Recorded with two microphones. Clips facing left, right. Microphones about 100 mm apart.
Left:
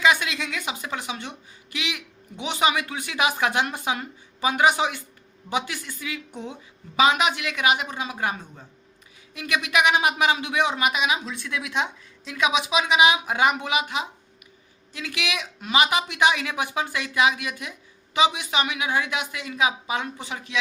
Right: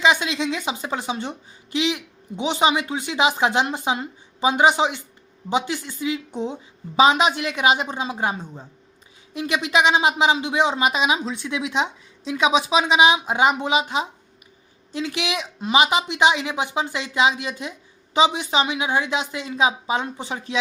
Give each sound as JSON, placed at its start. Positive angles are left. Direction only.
{"t": 0.0, "sound": "a woman's voice", "side_deg": -20}